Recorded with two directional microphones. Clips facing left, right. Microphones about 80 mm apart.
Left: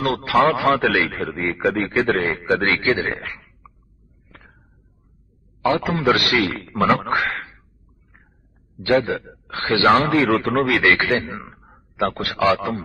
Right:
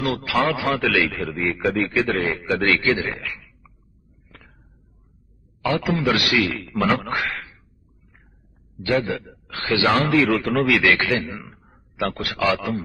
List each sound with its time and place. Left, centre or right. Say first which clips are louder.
0.0 s speech: left 4 dB; left
4.3 s a sound: left 2 dB; left
5.6 s speech: left 3 dB; left
9.0 s speech: left 3 dB; left